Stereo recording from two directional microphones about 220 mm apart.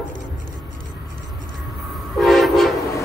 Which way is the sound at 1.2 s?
15° left (ahead or behind).